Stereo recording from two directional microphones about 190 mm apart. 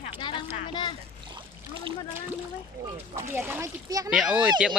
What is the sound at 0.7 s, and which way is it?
Speech, 25° left (ahead or behind).